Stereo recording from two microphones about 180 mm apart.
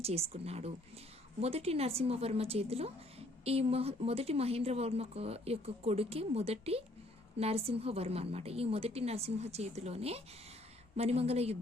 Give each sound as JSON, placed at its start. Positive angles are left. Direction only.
{"t": 0.0, "sound": "speech", "side_deg": -35}